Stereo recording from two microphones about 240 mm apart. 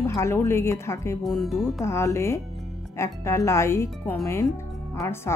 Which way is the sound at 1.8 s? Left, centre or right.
Centre.